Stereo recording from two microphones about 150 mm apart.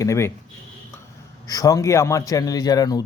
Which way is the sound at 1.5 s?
25° left (ahead or behind).